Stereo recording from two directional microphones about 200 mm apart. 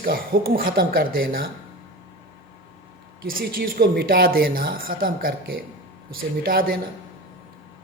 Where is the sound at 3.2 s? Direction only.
45° right (ahead or behind).